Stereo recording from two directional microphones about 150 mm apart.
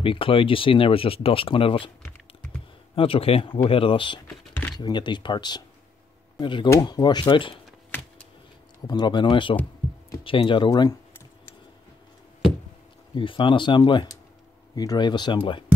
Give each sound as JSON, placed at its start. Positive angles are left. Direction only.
{"t": 0.0, "sound": "speech", "side_deg": 35}
{"t": 3.0, "sound": "speech", "side_deg": 40}
{"t": 8.8, "sound": "speech", "side_deg": 30}
{"t": 13.1, "sound": "speech", "side_deg": 35}